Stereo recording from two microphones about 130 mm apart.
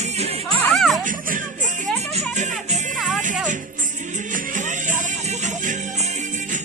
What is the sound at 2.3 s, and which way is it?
Music, 65° right (ahead or behind).